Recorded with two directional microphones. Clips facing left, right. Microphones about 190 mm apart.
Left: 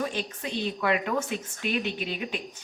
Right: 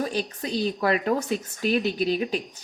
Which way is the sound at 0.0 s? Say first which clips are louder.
Right 3 dB; 35° right (ahead or behind).